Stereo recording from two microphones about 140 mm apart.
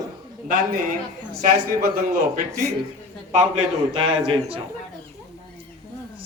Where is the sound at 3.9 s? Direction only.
45° right (ahead or behind).